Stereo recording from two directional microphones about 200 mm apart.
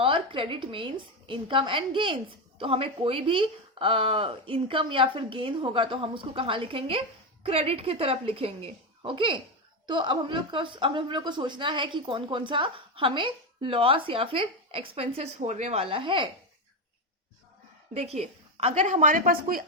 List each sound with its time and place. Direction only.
0.0 s a woman's voice: 25° right (ahead or behind)
17.9 s a woman's voice: 30° right (ahead or behind)